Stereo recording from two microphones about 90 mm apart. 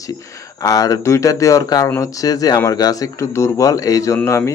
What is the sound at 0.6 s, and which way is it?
Speech, 40° left (ahead or behind).